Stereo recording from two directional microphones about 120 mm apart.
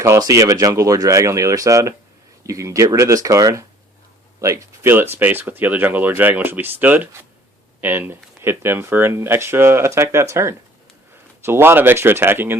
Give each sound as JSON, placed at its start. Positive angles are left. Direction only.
{"t": 0.0, "sound": "speech", "side_deg": -25}